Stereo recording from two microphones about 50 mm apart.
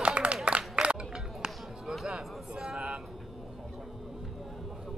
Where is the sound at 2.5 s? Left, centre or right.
Centre.